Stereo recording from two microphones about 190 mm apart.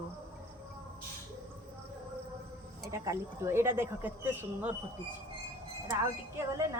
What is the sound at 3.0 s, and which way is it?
Speech, 15° right (ahead or behind).